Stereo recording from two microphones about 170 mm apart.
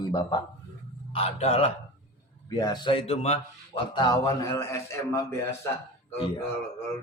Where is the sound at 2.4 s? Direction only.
20° left (ahead or behind).